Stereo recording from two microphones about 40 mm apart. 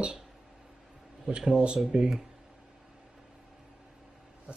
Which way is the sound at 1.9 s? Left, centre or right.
Right.